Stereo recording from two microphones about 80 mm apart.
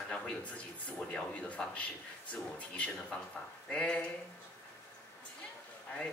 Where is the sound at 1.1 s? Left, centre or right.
Centre.